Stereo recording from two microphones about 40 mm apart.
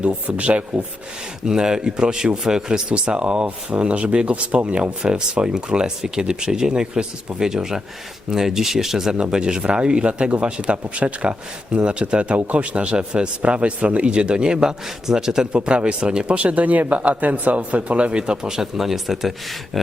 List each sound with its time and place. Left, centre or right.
0.0 s speech: right
1.5 s speech: centre
9.1 s speech: right
15.5 s speech: right
16.4 s speech: right; by 18.7 s centre
18.8 s speech: centre